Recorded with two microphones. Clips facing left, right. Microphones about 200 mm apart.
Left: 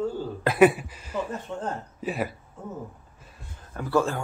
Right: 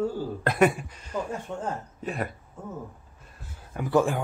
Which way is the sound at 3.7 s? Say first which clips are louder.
Right 1 dB; 15° right (ahead or behind).